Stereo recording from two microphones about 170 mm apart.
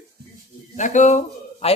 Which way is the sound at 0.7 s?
45° left (ahead or behind).